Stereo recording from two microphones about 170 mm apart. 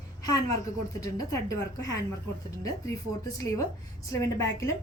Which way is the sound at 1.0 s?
20° left (ahead or behind).